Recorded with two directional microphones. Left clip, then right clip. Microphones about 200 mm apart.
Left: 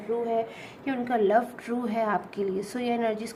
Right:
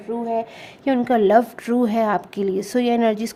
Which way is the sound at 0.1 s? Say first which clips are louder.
Right 3 dB; 45° right (ahead or behind).